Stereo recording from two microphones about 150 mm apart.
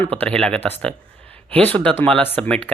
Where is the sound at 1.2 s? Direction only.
10° left (ahead or behind).